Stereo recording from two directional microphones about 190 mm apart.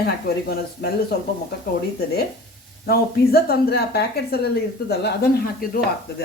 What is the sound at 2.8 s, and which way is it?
Speech, 55° left (ahead or behind).